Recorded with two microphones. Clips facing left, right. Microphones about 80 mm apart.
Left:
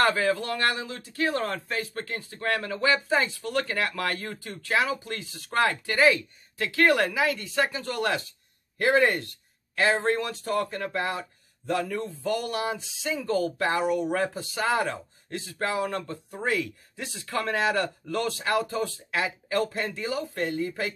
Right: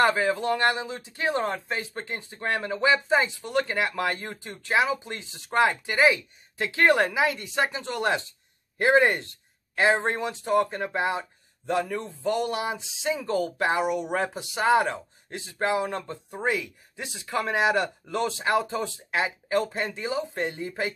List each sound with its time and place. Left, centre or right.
0.0 s speech: centre